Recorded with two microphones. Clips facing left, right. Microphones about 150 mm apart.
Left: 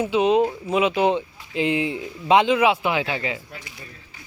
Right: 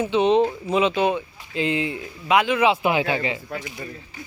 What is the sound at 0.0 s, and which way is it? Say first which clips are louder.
Speech: even; 5° left (ahead or behind).